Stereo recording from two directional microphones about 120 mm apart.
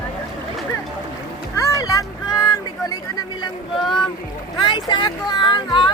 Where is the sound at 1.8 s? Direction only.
30° left (ahead or behind).